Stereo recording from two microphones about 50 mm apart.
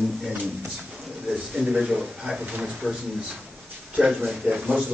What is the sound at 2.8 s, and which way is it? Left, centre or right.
Speech, centre.